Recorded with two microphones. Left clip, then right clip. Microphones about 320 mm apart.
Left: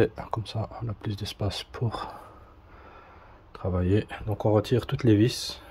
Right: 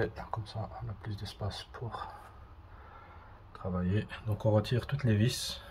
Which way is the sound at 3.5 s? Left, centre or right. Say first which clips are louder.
Left 10 dB; left.